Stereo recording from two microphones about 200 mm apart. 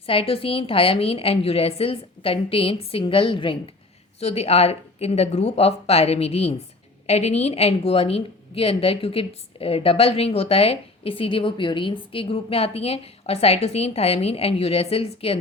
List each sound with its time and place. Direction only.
0.0 s a woman's voice: 30° left (ahead or behind)